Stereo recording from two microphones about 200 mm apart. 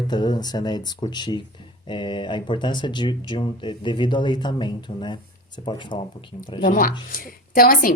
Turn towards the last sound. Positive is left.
turn(degrees=45)  # may be behind; listen again after turning